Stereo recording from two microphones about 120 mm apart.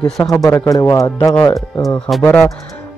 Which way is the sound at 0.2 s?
25° left (ahead or behind).